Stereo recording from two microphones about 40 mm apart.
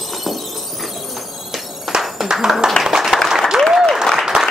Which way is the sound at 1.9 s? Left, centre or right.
Centre.